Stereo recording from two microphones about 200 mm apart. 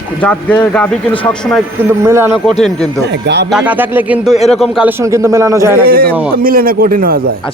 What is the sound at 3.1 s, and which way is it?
Speech, 55° right (ahead or behind).